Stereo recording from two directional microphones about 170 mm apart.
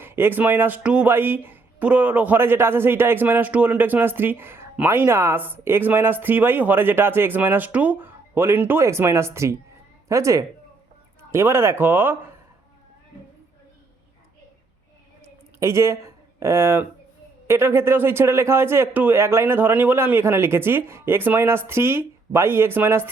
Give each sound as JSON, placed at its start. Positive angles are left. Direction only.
{"t": 0.0, "sound": "speech", "side_deg": -15}
{"t": 15.6, "sound": "speech", "side_deg": -15}